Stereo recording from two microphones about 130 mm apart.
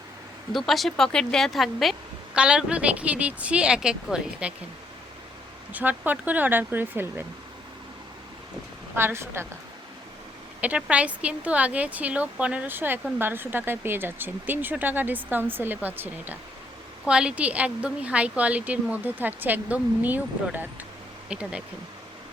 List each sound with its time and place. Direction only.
0.5 s speech: centre (ahead or behind)
5.7 s speech: 15° right (ahead or behind)
9.0 s a woman's voice: 20° right (ahead or behind)
10.6 s speech: 10° right (ahead or behind)